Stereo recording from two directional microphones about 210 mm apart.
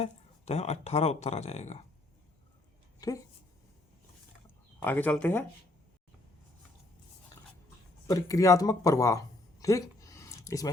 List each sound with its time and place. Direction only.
0.0 s speech: 30° left (ahead or behind)
3.0 s speech: 20° left (ahead or behind)
4.8 s speech: 10° left (ahead or behind)
8.0 s speech: 15° left (ahead or behind)